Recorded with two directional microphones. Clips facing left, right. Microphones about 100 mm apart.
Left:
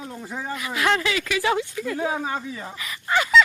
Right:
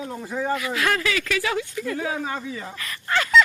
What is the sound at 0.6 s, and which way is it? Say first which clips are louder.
Speech: left 1 dB; 20° left (ahead or behind).